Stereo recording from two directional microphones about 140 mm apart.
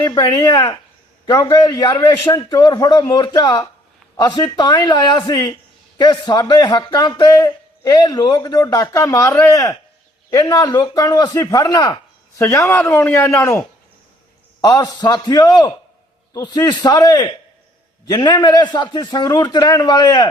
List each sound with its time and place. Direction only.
0.0 s a man's voice: 20° left (ahead or behind)